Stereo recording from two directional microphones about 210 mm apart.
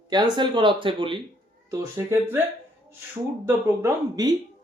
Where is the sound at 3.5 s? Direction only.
15° right (ahead or behind).